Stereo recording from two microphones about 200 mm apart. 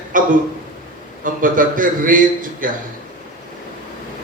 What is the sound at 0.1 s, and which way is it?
A man's voice, 40° right (ahead or behind).